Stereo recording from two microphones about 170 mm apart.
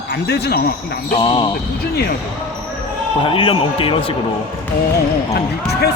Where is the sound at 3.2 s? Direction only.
30° left (ahead or behind).